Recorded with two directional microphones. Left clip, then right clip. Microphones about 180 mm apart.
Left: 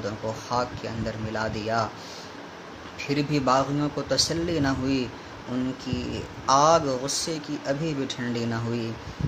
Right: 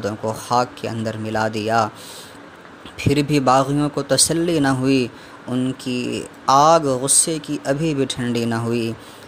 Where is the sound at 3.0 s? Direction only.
50° right (ahead or behind).